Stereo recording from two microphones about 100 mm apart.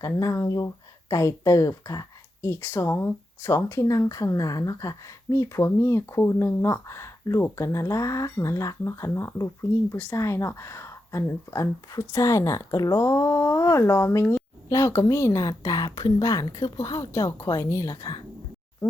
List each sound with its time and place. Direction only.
0.0 s speech: 35° left (ahead or behind)